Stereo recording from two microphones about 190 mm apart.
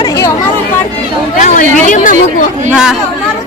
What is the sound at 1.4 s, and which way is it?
Speech, 40° left (ahead or behind).